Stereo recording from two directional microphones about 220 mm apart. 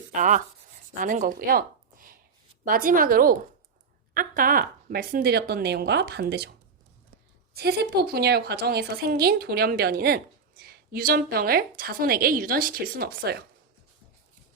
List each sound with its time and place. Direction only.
0.1 s a woman's voice: 35° right (ahead or behind)
7.5 s a woman's voice: 45° right (ahead or behind)